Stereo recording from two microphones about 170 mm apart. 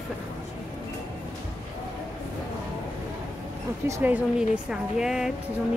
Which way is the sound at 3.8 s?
10° right (ahead or behind).